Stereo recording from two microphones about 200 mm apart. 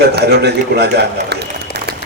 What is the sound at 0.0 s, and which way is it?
A man's voice, 55° right (ahead or behind).